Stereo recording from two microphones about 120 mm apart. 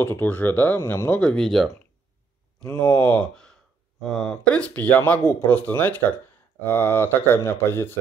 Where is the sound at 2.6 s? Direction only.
30° left (ahead or behind).